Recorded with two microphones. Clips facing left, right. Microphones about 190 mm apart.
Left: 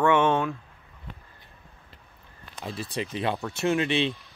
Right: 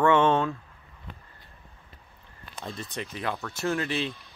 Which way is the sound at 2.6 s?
5° left (ahead or behind).